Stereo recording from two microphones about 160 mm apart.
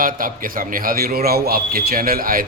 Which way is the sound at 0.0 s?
60° right (ahead or behind).